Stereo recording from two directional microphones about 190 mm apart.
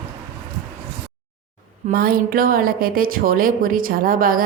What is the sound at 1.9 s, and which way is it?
A woman's voice, 50° right (ahead or behind).